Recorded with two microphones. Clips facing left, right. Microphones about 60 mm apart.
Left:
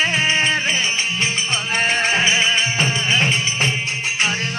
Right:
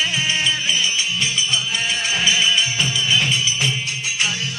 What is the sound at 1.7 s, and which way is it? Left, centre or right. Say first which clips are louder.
Music: left 4 dB; left.